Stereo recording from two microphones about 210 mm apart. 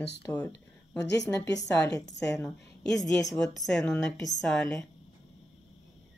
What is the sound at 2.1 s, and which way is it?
Speech, 55° left (ahead or behind).